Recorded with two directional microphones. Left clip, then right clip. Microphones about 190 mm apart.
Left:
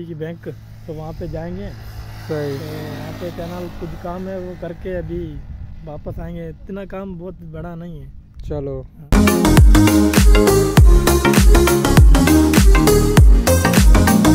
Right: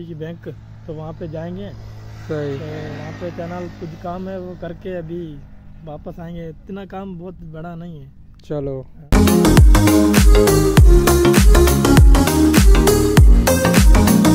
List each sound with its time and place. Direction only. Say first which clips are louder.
0.0 s speech: left 2 dB; 15° left (ahead or behind)
2.5 s speech: even; 60° left (ahead or behind)
3.6 s speech: left 2 dB; 45° left (ahead or behind)
4.6 s speech: left 2 dB; 10° left (ahead or behind)
8.5 s music: right 1 dB; 10° right (ahead or behind)